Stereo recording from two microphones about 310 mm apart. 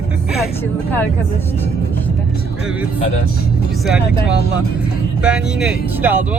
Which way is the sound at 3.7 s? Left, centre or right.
Centre.